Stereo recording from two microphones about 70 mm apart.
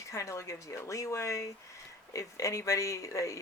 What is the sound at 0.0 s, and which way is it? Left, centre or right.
Speech, left.